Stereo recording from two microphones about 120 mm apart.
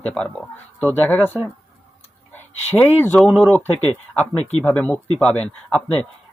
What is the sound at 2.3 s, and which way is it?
Speech, 15° left (ahead or behind).